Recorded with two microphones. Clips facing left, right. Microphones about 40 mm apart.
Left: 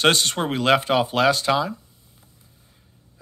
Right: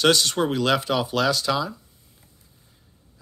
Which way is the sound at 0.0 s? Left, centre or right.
Left.